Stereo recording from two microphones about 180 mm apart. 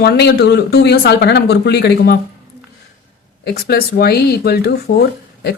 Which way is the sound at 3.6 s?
60° left (ahead or behind).